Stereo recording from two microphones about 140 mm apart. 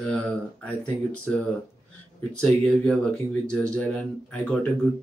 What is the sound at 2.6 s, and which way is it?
Speech, 10° left (ahead or behind).